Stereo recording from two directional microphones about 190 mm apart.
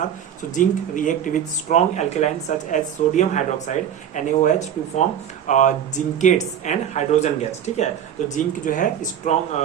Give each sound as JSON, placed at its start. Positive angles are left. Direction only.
{"t": 0.5, "sound": "speech", "side_deg": 40}